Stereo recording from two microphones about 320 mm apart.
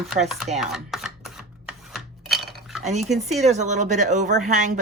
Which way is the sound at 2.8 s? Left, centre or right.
Right.